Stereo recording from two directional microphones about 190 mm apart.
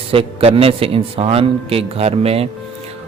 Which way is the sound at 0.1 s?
30° right (ahead or behind).